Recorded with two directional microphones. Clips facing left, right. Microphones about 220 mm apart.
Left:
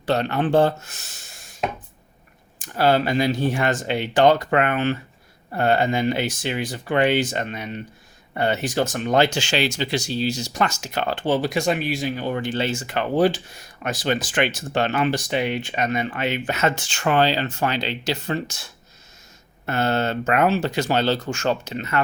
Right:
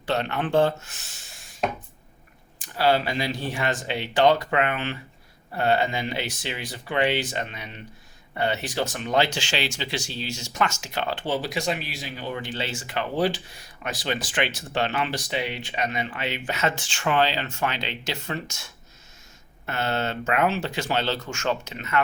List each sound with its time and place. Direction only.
0.0 s speech: 40° left (ahead or behind)
2.6 s speech: 50° left (ahead or behind)